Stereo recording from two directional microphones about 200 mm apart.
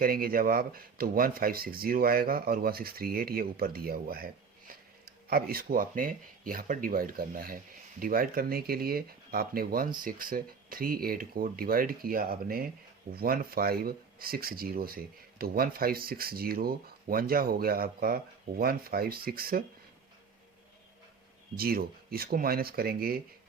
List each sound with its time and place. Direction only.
0.0 s speech: 45° right (ahead or behind)
5.3 s speech: 50° right (ahead or behind)
21.5 s speech: 50° right (ahead or behind)